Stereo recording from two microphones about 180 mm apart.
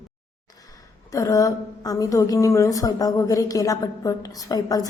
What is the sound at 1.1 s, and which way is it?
A woman's voice, 20° left (ahead or behind).